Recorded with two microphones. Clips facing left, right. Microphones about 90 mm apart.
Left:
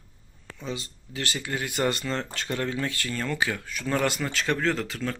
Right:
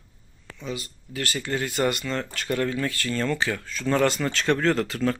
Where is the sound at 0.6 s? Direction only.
25° left (ahead or behind).